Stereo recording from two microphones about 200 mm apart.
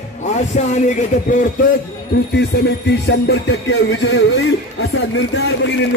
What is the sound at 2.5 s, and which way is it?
A man's voice, 55° left (ahead or behind).